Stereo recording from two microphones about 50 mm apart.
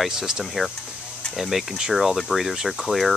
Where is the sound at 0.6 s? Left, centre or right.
Centre.